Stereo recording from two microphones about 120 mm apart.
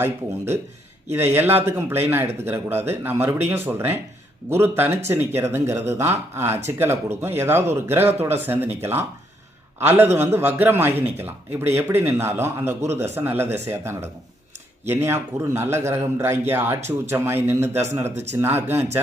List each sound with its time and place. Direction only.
0.0 s a man's voice: 20° right (ahead or behind)
18.1 s speech: 70° right (ahead or behind)
18.3 s a man's voice: 20° right (ahead or behind)